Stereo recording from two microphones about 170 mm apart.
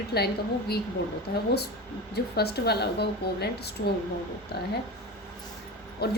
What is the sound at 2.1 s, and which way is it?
A woman's voice, 70° left (ahead or behind).